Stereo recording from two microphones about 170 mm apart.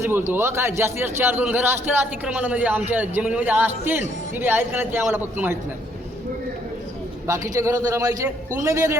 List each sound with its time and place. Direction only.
0.0 s a man's voice: 15° right (ahead or behind)
7.3 s a man's voice: 20° right (ahead or behind)